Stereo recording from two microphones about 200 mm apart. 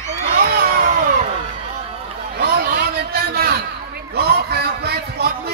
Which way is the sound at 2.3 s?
50° right (ahead or behind).